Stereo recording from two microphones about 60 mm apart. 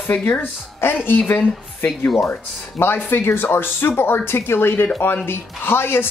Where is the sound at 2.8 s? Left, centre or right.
Left.